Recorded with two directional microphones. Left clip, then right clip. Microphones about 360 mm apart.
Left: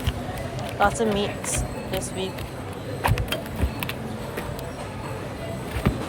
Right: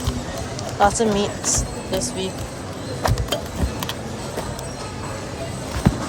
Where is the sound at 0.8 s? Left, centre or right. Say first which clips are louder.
Right 4 dB; centre.